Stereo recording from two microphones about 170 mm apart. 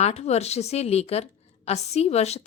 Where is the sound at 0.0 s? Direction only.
40° left (ahead or behind).